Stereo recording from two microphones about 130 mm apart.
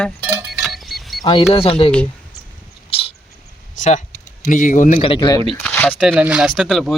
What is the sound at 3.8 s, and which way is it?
Speech, 65° left (ahead or behind).